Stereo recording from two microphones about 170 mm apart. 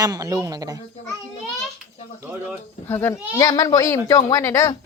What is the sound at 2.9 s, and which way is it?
Speech, 15° left (ahead or behind).